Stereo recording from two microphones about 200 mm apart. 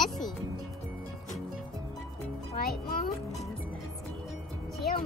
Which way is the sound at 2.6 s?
50° left (ahead or behind).